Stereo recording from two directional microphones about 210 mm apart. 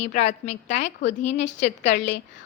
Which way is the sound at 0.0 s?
30° left (ahead or behind).